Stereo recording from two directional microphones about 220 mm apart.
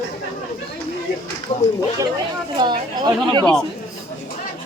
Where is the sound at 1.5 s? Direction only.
30° left (ahead or behind).